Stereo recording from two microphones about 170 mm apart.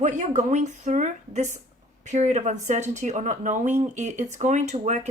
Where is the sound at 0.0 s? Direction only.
45° right (ahead or behind).